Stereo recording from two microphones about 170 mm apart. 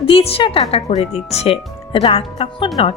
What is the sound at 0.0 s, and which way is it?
Speech, 35° left (ahead or behind).